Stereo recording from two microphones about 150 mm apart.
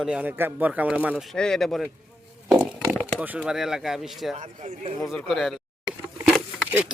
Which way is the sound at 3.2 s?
10° right (ahead or behind).